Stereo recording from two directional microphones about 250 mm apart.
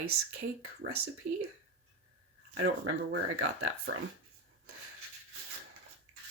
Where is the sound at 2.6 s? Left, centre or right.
Right.